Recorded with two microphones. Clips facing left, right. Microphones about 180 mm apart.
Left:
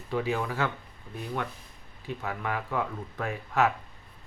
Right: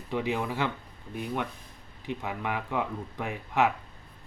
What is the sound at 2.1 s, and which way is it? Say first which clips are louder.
Speech: even; 15° right (ahead or behind).